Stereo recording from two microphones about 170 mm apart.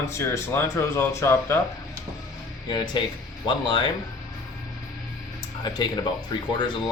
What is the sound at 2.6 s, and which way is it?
Speech, 25° left (ahead or behind).